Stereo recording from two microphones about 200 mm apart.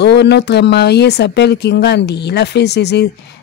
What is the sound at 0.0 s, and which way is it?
Speech, 60° left (ahead or behind).